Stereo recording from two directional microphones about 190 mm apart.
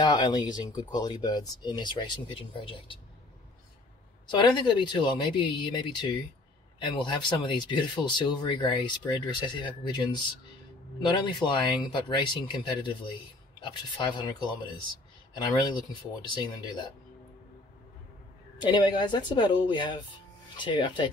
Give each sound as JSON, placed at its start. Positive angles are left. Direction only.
{"t": 0.0, "sound": "speech", "side_deg": 20}
{"t": 4.3, "sound": "speech", "side_deg": 25}
{"t": 16.3, "sound": "speech", "side_deg": 25}
{"t": 18.6, "sound": "speech", "side_deg": 25}